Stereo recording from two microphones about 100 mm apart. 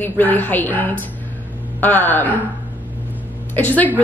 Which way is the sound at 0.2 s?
20° left (ahead or behind).